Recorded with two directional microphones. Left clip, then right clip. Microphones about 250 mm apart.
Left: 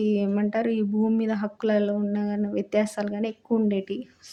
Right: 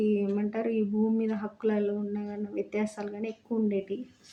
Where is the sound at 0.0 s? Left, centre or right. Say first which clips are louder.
Left 3 dB; left.